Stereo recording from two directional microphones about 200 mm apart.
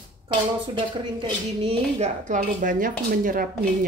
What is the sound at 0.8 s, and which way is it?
Speech, 25° right (ahead or behind).